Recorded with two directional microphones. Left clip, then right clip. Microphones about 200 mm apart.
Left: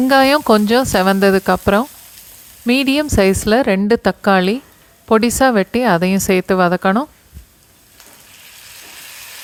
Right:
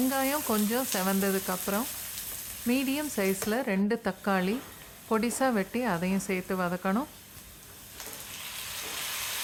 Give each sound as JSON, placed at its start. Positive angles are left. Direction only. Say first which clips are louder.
{"t": 0.1, "sound": "speech", "louder": "left 18 dB", "side_deg": 45}